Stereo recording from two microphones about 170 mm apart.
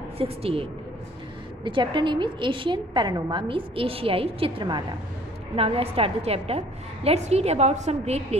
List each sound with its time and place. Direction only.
0.2 s a woman's voice: 35° right (ahead or behind)